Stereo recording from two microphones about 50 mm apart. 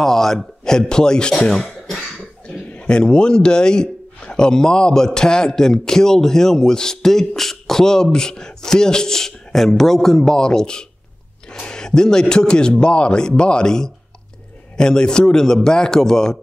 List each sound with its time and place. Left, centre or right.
0.0 s a man's voice: centre